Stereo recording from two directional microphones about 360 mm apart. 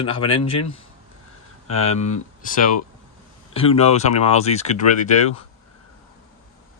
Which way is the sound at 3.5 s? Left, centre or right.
Centre.